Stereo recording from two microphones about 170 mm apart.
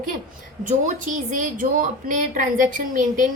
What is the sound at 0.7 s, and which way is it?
A woman's voice, 50° right (ahead or behind).